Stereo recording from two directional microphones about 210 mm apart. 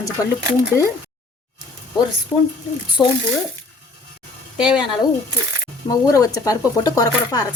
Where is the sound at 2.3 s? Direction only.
20° left (ahead or behind).